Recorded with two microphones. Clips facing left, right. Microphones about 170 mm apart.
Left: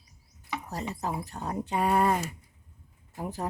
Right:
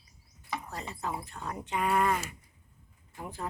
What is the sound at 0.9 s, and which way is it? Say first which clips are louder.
Speech: left 2 dB; 40° left (ahead or behind).